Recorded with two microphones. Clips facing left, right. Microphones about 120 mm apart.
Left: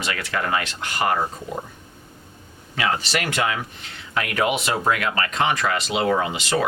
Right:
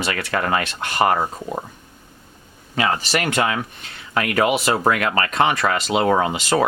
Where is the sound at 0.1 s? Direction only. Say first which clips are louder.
Right 2 dB; 45° right (ahead or behind).